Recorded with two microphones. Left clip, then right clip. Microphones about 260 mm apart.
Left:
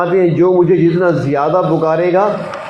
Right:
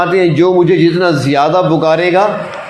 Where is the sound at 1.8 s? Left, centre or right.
Right.